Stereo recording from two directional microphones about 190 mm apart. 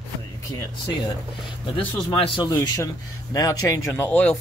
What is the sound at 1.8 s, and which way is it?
Speech, 30° left (ahead or behind).